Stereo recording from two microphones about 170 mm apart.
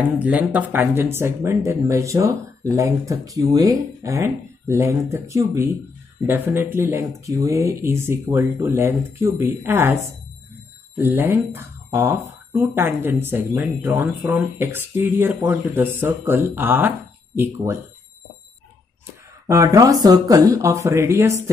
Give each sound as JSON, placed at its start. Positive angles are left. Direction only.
{"t": 0.2, "sound": "speech", "side_deg": -10}
{"t": 11.0, "sound": "speech", "side_deg": -10}
{"t": 19.4, "sound": "speech", "side_deg": -20}